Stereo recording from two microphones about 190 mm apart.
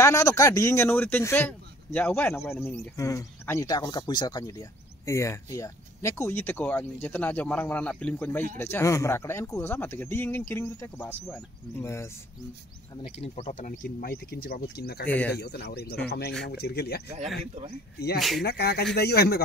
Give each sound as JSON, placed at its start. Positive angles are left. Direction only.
{"t": 0.0, "sound": "speech", "side_deg": 15}
{"t": 12.9, "sound": "speech", "side_deg": 30}
{"t": 15.0, "sound": "speech", "side_deg": 10}
{"t": 15.3, "sound": "speech", "side_deg": 60}
{"t": 18.4, "sound": "speech", "side_deg": 55}